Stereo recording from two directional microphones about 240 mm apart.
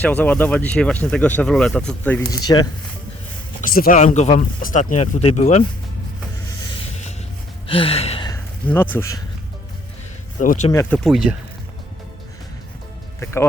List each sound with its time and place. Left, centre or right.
0.0 s speech: centre
3.6 s speech: left
7.7 s gasp: left
8.6 s speech: centre
10.4 s speech: left
10.7 s speech: centre
13.1 s speech: centre